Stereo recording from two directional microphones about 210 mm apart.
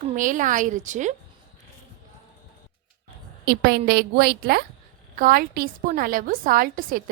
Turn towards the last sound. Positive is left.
turn(degrees=-45)  # may be behind; listen again after turning